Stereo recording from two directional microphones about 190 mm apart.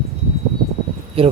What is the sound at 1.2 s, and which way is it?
Speech, 30° right (ahead or behind).